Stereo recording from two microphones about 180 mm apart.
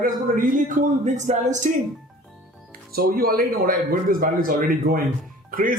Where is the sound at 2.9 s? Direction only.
55° right (ahead or behind).